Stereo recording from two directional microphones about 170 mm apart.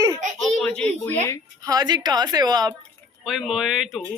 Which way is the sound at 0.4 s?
5° left (ahead or behind).